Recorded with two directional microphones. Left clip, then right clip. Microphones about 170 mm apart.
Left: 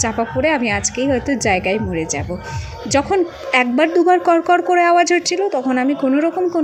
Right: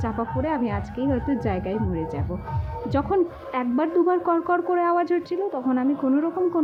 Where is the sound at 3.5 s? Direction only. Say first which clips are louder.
Left 10 dB; 20° left (ahead or behind).